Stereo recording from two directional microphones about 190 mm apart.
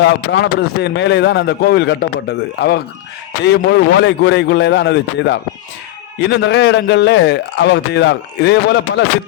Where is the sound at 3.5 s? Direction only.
70° left (ahead or behind).